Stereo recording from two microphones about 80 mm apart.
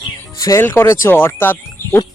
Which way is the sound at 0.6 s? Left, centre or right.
Left.